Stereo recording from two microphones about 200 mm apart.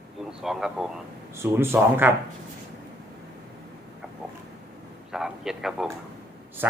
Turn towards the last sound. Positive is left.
turn(degrees=0)  # may be behind; listen again after turning